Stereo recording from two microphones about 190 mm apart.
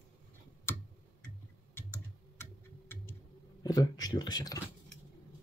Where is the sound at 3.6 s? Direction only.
20° left (ahead or behind).